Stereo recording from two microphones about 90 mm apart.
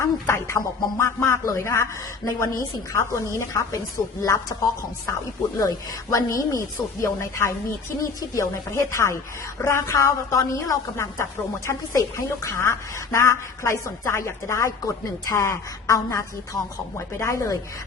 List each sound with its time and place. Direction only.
0.0 s a woman's voice: 30° left (ahead or behind)